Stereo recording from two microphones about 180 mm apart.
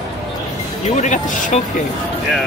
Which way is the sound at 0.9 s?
40° left (ahead or behind).